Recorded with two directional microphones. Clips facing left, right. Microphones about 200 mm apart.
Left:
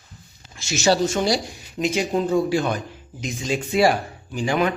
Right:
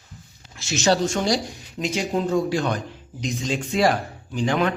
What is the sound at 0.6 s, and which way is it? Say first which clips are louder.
Speech: left 1 dB; centre (ahead or behind).